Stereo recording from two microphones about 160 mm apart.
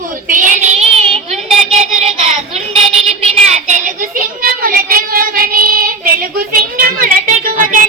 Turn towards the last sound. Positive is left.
turn(degrees=-55)  # may be behind; listen again after turning